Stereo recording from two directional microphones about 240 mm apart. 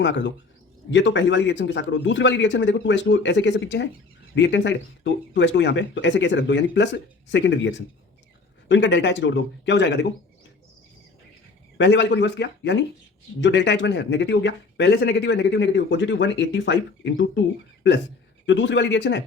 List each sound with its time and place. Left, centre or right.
0.0 s speech: left
11.8 s speech: left
18.4 s speech: left